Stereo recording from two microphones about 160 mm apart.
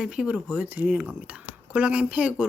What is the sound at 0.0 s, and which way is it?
Speech, 5° right (ahead or behind).